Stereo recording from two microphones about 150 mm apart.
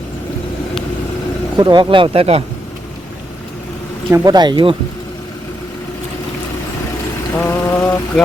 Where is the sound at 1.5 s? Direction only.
30° right (ahead or behind).